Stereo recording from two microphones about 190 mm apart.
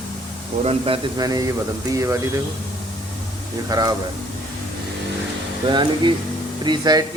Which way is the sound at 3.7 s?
20° right (ahead or behind).